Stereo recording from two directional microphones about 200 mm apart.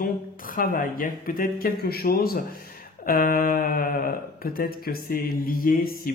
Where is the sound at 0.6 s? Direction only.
45° left (ahead or behind).